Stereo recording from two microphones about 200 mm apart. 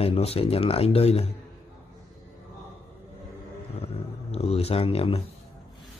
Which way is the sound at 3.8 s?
30° left (ahead or behind).